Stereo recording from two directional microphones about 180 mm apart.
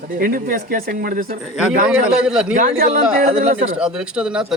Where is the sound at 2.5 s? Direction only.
50° right (ahead or behind).